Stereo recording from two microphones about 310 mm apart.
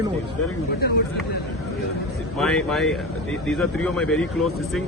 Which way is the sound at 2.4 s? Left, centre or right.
Centre.